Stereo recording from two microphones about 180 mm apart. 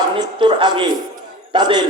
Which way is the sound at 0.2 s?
25° right (ahead or behind).